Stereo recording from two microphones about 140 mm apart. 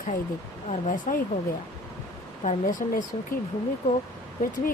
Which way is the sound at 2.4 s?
60° left (ahead or behind).